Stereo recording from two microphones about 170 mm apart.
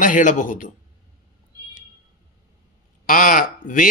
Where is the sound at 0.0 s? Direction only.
50° left (ahead or behind).